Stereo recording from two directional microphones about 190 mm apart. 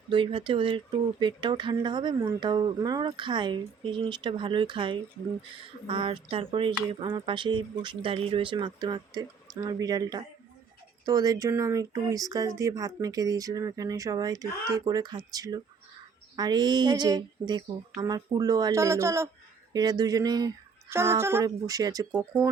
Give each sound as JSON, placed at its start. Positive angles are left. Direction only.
{"t": 0.1, "sound": "speech", "side_deg": -25}